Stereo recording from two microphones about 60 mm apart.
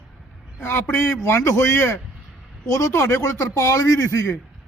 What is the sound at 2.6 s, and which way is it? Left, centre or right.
A man's voice, left.